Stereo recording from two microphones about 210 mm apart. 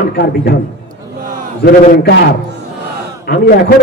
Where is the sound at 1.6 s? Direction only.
50° left (ahead or behind).